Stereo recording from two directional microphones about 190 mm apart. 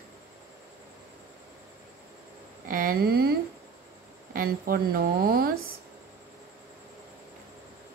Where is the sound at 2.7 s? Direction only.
45° right (ahead or behind).